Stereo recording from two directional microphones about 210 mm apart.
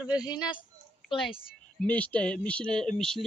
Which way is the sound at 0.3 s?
20° left (ahead or behind).